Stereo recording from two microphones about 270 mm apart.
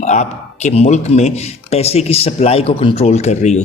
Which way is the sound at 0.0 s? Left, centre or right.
Left.